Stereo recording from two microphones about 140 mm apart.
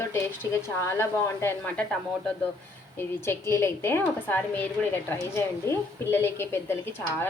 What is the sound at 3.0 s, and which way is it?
A woman's voice, 15° left (ahead or behind).